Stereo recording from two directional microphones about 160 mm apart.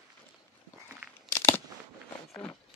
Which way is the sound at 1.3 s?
15° left (ahead or behind).